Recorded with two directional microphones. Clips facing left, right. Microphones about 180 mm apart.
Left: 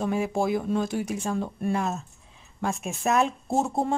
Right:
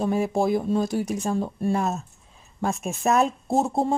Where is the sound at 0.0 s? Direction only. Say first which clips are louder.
Right 3 dB; 35° right (ahead or behind).